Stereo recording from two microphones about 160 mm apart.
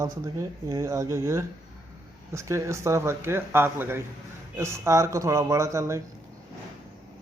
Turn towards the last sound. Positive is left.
turn(degrees=-20)  # may be behind; listen again after turning